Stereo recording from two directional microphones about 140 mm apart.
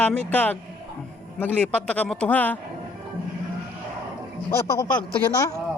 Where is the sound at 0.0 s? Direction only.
10° left (ahead or behind).